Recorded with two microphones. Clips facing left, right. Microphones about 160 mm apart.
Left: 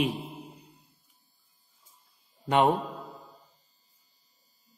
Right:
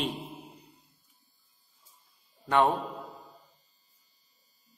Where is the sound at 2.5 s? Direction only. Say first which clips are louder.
Left 2 dB; 20° left (ahead or behind).